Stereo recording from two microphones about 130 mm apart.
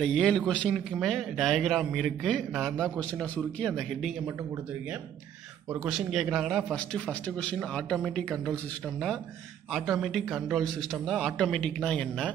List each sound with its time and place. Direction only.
0.0 s a man's voice: 5° left (ahead or behind)
5.7 s a man's voice: 5° right (ahead or behind)
9.7 s a man's voice: centre (ahead or behind)